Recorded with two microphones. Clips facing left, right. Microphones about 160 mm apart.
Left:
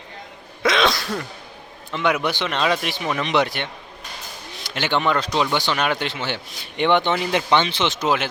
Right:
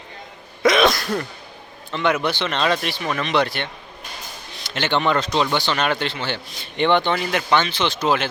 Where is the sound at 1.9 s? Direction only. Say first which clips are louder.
Right 1 dB; 10° left (ahead or behind).